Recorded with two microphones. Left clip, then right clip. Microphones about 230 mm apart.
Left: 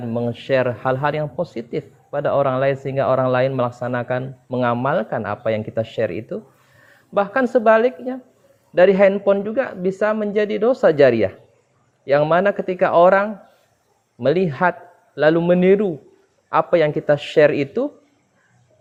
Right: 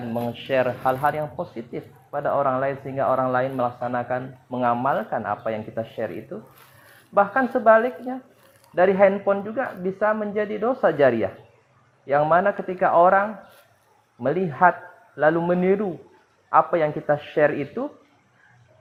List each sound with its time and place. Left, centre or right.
0.1 s a man's voice: left